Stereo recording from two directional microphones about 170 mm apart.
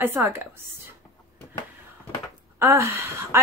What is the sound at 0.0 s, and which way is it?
Speech, 15° right (ahead or behind).